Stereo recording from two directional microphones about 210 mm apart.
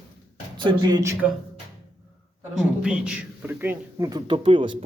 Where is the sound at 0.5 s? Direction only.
20° right (ahead or behind).